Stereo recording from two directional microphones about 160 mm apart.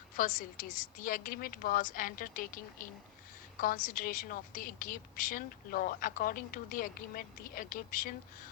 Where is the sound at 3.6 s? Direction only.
60° left (ahead or behind).